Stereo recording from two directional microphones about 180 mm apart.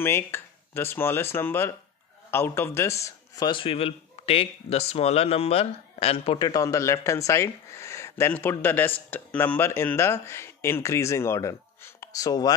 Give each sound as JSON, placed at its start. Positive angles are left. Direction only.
{"t": 0.0, "sound": "a man's voice", "side_deg": 15}